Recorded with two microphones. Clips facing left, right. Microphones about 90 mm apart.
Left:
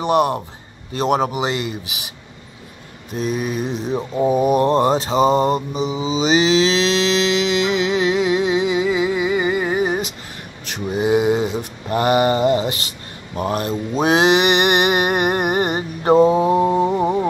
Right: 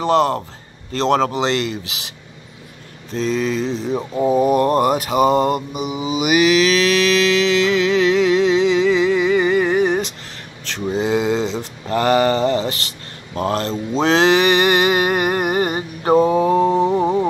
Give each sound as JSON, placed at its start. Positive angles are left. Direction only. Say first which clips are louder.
{"t": 0.0, "sound": "speech", "louder": "right 1 dB", "side_deg": 15}
{"t": 3.6, "sound": "speech", "louder": "right 1 dB", "side_deg": 15}
{"t": 4.5, "sound": "mantra", "louder": "even", "side_deg": 20}
{"t": 17.0, "sound": "a sound", "louder": "right 1 dB", "side_deg": 10}